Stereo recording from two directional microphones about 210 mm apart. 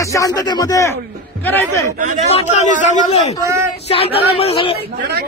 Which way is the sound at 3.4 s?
15° right (ahead or behind).